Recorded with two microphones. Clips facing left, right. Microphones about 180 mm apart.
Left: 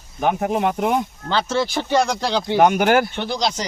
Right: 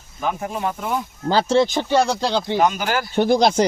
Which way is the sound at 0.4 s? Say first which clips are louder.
Left 5 dB; 65° left (ahead or behind).